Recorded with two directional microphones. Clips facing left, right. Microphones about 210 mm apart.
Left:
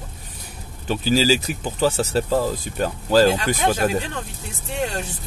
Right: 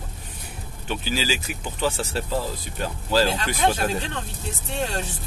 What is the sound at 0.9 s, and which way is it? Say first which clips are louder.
Speech: left 8 dB; 40° left (ahead or behind).